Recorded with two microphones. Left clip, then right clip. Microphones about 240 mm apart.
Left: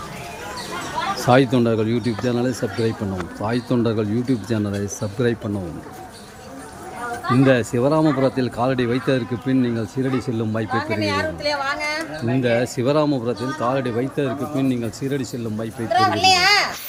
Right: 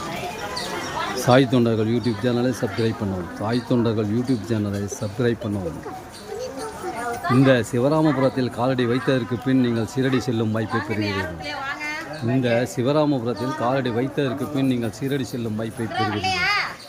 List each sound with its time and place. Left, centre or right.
1.2 s speech: centre
7.3 s speech: centre
10.8 s a woman's voice: left
12.4 s speech: centre
15.9 s a child's voice: left